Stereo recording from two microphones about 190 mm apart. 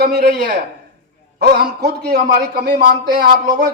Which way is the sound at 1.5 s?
55° right (ahead or behind).